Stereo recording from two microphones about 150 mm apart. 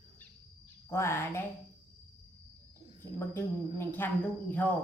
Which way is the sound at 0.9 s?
15° left (ahead or behind).